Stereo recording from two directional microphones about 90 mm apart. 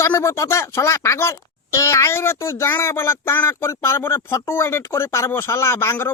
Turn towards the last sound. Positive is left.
turn(degrees=30)  # may be behind; listen again after turning